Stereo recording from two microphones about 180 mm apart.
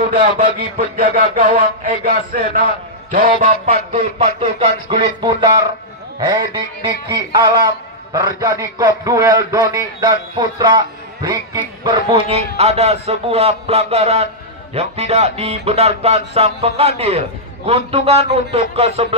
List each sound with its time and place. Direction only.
0.7 s a man's voice: 55° right (ahead or behind)
3.6 s a man's voice: 35° right (ahead or behind)
11.8 s a man's voice: 25° right (ahead or behind)
12.3 s music: 40° right (ahead or behind)